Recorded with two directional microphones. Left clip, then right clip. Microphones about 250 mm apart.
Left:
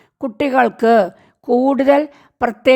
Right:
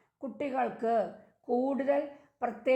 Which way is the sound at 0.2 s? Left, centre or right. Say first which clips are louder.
Left 17 dB; left.